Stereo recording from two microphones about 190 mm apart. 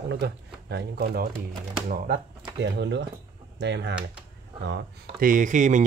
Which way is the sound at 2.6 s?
65° right (ahead or behind).